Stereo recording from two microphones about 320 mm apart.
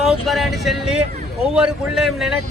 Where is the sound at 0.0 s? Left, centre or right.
Centre.